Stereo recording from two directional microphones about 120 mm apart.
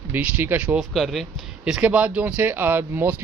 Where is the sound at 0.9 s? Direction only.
Centre (ahead or behind).